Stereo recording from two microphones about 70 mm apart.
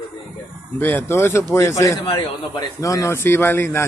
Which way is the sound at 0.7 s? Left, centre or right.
Left.